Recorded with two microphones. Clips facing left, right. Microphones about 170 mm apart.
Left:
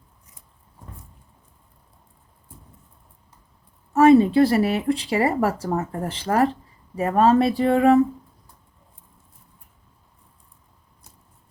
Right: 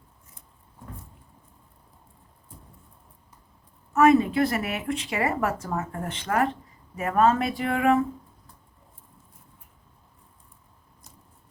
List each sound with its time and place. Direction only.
3.9 s speech: 30° left (ahead or behind)